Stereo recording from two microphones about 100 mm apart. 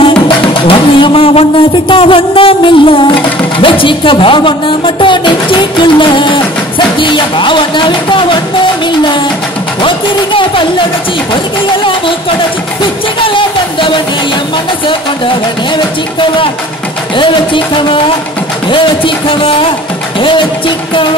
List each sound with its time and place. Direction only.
0.6 s a sound: 60° left (ahead or behind)
3.5 s speech: 60° left (ahead or behind)
7.0 s music: 55° left (ahead or behind)
9.8 s music: 55° left (ahead or behind)
13.2 s music: 60° left (ahead or behind)
15.7 s speech: 55° left (ahead or behind)